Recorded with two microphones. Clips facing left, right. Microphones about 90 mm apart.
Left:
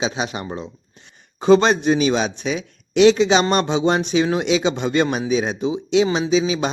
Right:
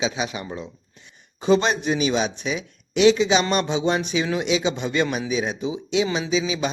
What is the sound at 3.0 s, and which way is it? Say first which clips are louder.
Speech: left 3 dB; 60° left (ahead or behind).